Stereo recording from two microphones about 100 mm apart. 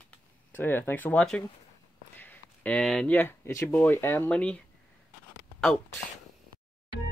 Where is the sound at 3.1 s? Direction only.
25° left (ahead or behind).